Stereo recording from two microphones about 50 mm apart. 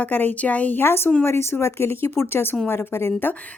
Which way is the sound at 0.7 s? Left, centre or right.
Left.